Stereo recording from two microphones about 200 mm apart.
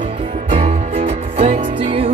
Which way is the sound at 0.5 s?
30° right (ahead or behind).